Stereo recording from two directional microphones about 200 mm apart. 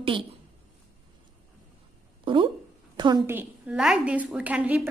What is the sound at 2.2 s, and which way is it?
A woman's voice, 25° right (ahead or behind).